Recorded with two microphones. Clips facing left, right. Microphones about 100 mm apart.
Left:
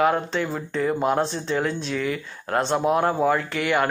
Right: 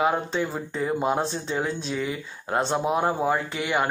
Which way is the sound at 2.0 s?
15° right (ahead or behind).